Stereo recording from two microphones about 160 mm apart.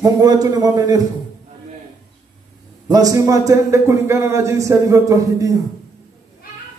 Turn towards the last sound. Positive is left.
turn(degrees=-20)  # may be behind; listen again after turning